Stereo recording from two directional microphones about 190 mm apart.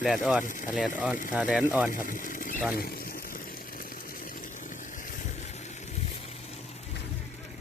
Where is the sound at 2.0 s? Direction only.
45° left (ahead or behind).